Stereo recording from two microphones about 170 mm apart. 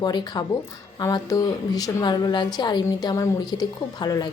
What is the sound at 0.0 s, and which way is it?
Speech, 25° left (ahead or behind).